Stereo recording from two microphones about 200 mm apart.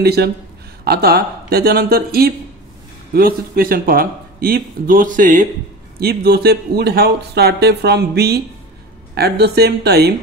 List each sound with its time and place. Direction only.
0.0 s speech: 55° right (ahead or behind)
5.9 s speech: 50° right (ahead or behind)